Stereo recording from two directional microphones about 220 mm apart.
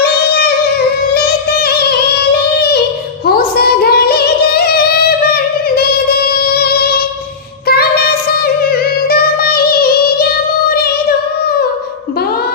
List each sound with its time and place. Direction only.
0.0 s female singing: 45° left (ahead or behind)
1.1 s music: 45° left (ahead or behind)
3.2 s singing: 45° left (ahead or behind)
6.5 s music: 45° left (ahead or behind)